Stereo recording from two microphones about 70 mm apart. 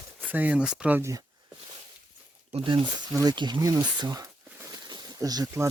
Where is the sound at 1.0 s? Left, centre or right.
Right.